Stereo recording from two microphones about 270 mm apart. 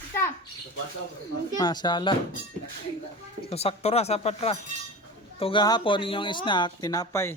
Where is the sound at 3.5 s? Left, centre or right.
Left.